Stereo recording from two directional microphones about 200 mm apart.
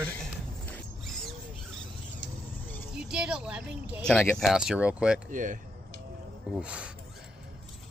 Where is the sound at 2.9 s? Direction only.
5° right (ahead or behind).